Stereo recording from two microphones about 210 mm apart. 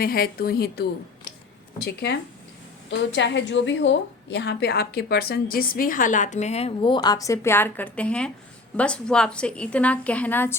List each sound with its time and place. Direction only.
0.0 s a woman's voice: 45° left (ahead or behind); by 10.6 s 10° left (ahead or behind)